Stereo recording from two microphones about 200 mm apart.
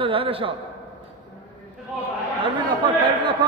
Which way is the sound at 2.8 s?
25° right (ahead or behind).